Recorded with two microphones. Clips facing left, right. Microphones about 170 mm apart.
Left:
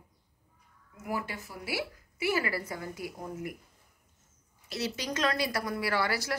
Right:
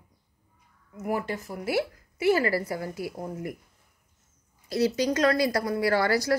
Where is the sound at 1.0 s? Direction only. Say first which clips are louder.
Right 6 dB; 45° right (ahead or behind).